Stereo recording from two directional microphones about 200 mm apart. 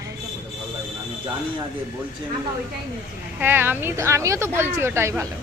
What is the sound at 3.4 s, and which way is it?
A woman's voice, 10° right (ahead or behind).